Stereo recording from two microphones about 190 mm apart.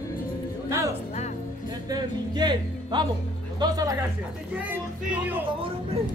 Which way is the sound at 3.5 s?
20° right (ahead or behind).